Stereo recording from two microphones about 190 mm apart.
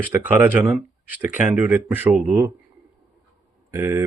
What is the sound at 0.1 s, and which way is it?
Speech, 10° right (ahead or behind).